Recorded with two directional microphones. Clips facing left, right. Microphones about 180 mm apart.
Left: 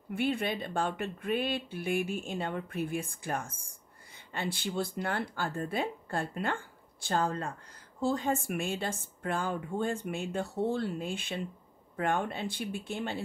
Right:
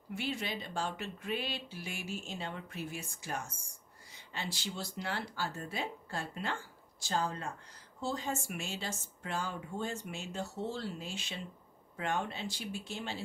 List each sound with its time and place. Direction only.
0.1 s speech: 55° left (ahead or behind)